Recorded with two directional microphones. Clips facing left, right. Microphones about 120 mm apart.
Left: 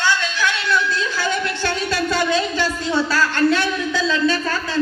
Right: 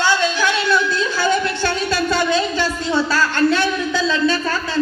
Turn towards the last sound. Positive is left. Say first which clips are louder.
# right 1 dB
turn(degrees=-30)  # may be behind; listen again after turning